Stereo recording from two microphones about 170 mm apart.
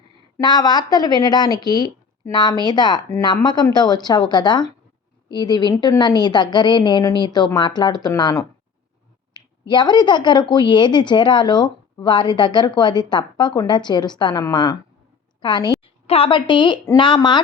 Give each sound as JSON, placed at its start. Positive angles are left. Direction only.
{"t": 0.3, "sound": "speech", "side_deg": 25}